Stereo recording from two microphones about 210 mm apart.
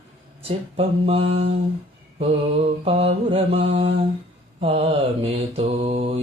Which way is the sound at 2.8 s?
30° right (ahead or behind).